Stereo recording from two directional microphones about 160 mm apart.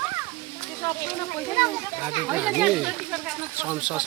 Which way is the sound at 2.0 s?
10° right (ahead or behind).